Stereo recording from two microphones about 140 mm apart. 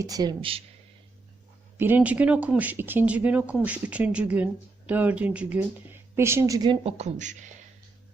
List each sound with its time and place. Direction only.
0.0 s a woman's voice: 25° right (ahead or behind)
1.8 s speech: 10° right (ahead or behind)
6.7 s speech: 50° right (ahead or behind)